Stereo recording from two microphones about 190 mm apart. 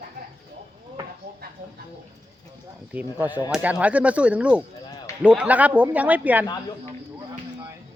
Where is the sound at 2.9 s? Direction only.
10° right (ahead or behind).